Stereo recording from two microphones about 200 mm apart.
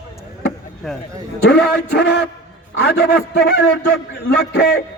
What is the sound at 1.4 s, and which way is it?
A man's voice, 55° left (ahead or behind).